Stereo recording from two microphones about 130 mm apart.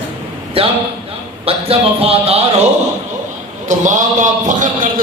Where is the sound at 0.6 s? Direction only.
45° right (ahead or behind).